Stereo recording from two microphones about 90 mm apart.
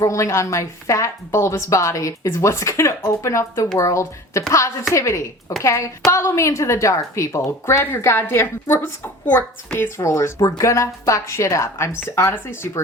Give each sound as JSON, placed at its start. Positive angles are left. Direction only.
{"t": 0.0, "sound": "speech", "side_deg": 35}